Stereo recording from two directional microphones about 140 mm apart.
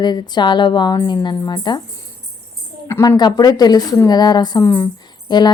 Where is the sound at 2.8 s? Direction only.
20° left (ahead or behind).